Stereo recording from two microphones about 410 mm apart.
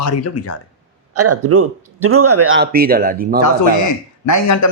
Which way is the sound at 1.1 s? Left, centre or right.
Right.